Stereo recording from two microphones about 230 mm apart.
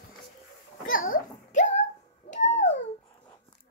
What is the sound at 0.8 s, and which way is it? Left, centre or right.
Babbling, left.